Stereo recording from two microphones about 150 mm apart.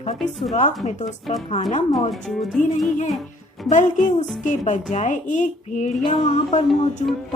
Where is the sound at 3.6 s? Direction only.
55° left (ahead or behind).